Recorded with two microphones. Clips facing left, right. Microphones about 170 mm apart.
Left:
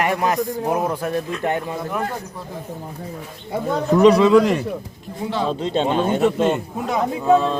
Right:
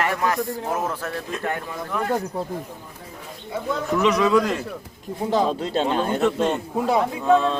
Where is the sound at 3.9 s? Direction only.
35° left (ahead or behind).